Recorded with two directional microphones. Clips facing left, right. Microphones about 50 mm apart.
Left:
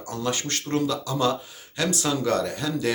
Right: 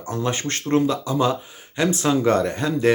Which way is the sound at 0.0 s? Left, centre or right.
Right.